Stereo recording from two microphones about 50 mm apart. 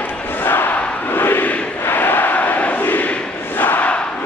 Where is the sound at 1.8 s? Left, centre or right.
Left.